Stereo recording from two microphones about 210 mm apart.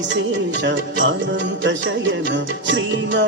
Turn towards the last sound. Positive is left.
turn(degrees=-60)  # may be behind; listen again after turning